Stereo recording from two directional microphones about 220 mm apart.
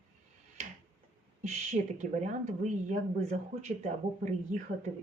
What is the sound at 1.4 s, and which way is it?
Speech, 35° right (ahead or behind).